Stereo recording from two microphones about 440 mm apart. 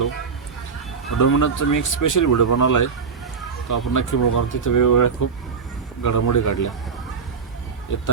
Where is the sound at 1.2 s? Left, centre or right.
Left.